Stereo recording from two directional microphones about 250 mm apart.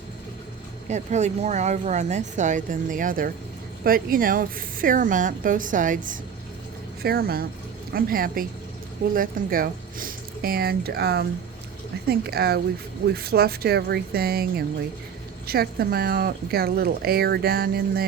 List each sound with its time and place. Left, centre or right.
0.9 s speech: right